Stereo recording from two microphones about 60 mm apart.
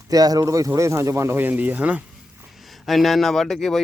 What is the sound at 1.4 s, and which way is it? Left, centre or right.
Speech, right.